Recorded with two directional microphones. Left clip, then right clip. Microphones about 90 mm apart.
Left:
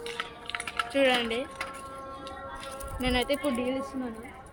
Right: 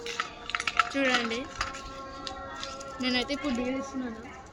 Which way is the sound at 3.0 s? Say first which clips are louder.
Left 2 dB; 45° right (ahead or behind).